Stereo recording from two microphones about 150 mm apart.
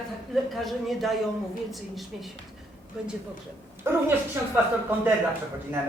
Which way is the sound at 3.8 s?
15° right (ahead or behind).